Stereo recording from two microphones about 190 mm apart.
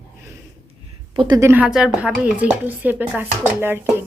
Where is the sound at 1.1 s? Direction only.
25° right (ahead or behind).